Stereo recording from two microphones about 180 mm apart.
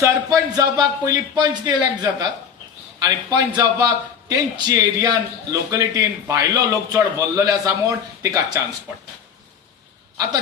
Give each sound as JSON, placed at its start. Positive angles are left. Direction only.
{"t": 0.0, "sound": "a man's voice", "side_deg": -20}